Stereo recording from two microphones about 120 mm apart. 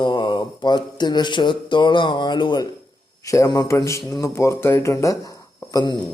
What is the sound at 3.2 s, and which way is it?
Speech, 25° left (ahead or behind).